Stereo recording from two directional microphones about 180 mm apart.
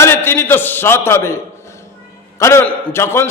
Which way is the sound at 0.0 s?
10° left (ahead or behind).